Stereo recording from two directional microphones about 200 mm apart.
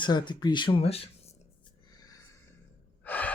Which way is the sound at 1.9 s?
20° left (ahead or behind).